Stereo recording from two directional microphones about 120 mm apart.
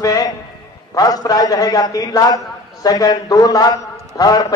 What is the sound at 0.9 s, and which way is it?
A man's voice, 30° left (ahead or behind).